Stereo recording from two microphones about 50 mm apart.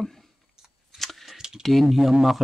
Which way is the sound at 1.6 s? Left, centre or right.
Centre.